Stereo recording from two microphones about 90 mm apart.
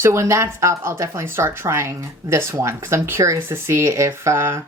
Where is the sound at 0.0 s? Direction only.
30° right (ahead or behind).